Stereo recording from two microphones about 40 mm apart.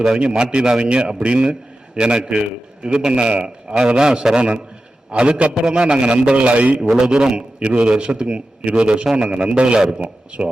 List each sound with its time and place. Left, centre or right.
0.1 s a man's voice: right
6.9 s a man's voice: centre